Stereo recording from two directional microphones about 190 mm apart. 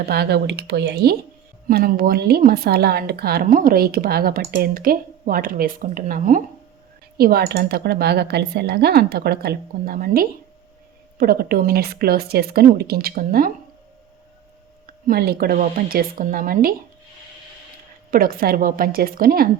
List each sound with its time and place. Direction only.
0.0 s speech: 55° right (ahead or behind)
1.6 s a woman's voice: 50° right (ahead or behind)
15.0 s a woman's voice: 55° right (ahead or behind)
18.1 s a woman's voice: 50° right (ahead or behind)